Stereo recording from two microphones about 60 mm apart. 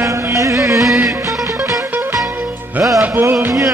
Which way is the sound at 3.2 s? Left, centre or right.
Right.